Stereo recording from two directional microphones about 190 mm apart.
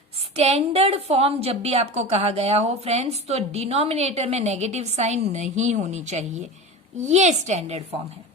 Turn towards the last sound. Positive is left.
turn(degrees=-35)  # may be behind; listen again after turning